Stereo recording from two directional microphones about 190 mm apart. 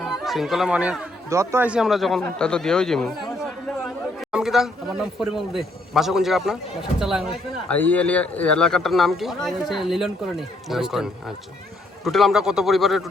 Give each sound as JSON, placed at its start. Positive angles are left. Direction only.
{"t": 0.0, "sound": "speech", "side_deg": 0}
{"t": 7.7, "sound": "speech", "side_deg": 10}